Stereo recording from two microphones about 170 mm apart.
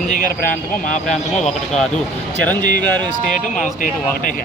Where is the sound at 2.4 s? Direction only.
10° left (ahead or behind).